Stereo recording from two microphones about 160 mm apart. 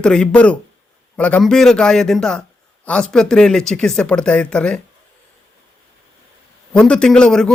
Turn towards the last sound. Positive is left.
turn(degrees=5)  # may be behind; listen again after turning